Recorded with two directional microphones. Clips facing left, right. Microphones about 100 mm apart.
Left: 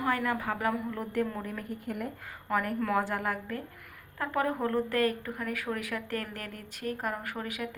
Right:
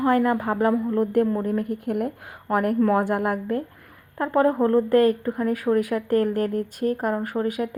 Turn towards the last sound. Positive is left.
turn(degrees=-40)  # may be behind; listen again after turning